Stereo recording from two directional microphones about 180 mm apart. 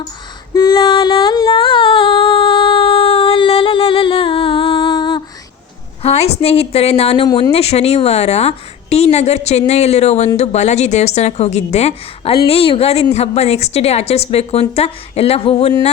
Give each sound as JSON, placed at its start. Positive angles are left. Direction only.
{"t": 0.5, "sound": "a sound", "side_deg": 25}
{"t": 6.0, "sound": "a woman's voice", "side_deg": 35}
{"t": 7.3, "sound": "speech", "side_deg": 20}
{"t": 7.5, "sound": "a woman's voice", "side_deg": 35}